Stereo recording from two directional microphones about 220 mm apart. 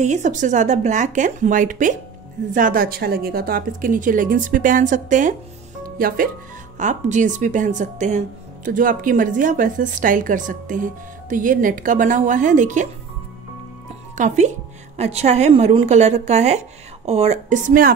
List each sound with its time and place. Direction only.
0.0 s a woman's voice: 35° right (ahead or behind)
14.1 s a woman's voice: 35° right (ahead or behind)